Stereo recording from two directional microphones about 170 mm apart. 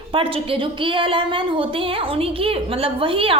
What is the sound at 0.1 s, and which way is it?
A woman's voice, 30° right (ahead or behind).